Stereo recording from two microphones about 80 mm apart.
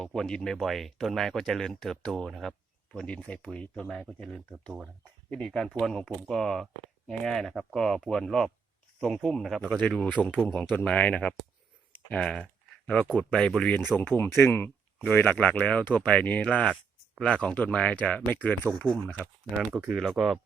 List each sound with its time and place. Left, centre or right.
0.0 s speech: centre
3.8 s speech: centre
5.3 s speech: centre
13.7 s speech: left
19.9 s speech: centre